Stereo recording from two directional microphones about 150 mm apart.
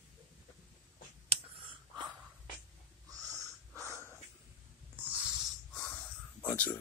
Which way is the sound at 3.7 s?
20° right (ahead or behind).